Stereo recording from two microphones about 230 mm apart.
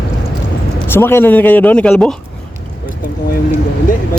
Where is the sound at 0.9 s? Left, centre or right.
Centre.